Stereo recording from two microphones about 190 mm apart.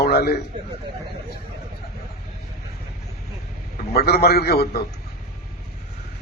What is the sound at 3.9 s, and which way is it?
Speech, 55° left (ahead or behind).